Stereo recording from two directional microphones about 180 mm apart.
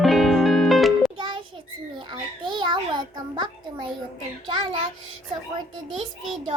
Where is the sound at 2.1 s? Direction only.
25° right (ahead or behind).